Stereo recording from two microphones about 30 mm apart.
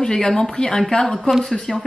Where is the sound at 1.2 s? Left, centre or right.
Centre.